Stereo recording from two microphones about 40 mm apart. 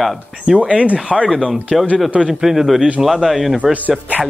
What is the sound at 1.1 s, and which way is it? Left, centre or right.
Speech, centre.